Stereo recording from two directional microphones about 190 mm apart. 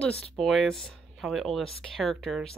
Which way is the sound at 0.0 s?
5° left (ahead or behind).